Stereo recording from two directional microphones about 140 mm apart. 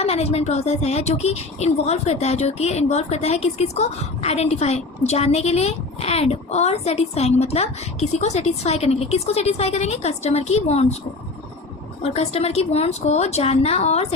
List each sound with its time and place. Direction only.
0.0 s speech: 50° left (ahead or behind)
12.0 s speech: 45° left (ahead or behind)